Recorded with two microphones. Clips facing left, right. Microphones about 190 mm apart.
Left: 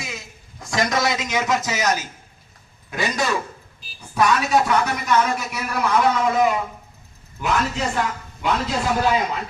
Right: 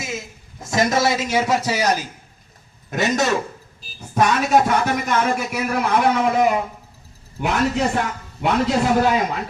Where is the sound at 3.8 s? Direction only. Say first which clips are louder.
Right 1 dB; 45° right (ahead or behind).